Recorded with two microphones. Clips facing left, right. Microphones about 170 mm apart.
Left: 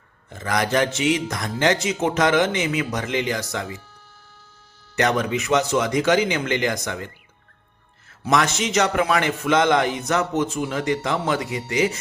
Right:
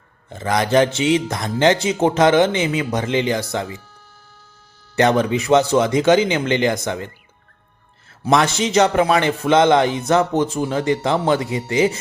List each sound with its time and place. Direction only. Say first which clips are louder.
0.3 s a man's voice: right 4 dB; 25° right (ahead or behind)
4.9 s a man's voice: right 5 dB; 30° right (ahead or behind)
8.2 s a man's voice: right 4 dB; 30° right (ahead or behind)